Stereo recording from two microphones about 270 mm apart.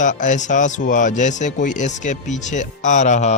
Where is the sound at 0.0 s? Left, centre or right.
Left.